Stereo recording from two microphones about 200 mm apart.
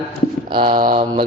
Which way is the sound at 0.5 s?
25° right (ahead or behind).